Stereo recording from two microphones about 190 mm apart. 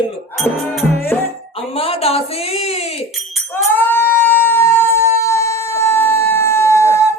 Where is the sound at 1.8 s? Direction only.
30° left (ahead or behind).